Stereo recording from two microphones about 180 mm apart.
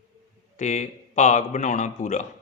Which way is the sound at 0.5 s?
40° left (ahead or behind).